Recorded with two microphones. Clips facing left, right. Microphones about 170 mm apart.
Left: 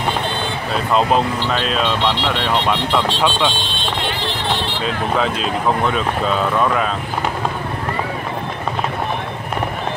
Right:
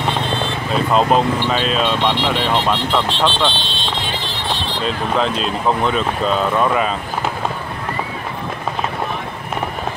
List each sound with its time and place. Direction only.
0.9 s speech: centre (ahead or behind)
4.8 s speech: 5° left (ahead or behind)